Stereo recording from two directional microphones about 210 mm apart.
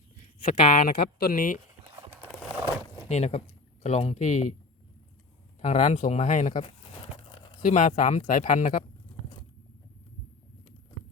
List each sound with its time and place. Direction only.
0.4 s speech: 40° left (ahead or behind)
2.2 s a sound: 5° right (ahead or behind)
3.1 s speech: 30° left (ahead or behind)
5.5 s speech: 35° left (ahead or behind)
7.3 s a sound: 25° left (ahead or behind)
7.6 s speech: 35° left (ahead or behind)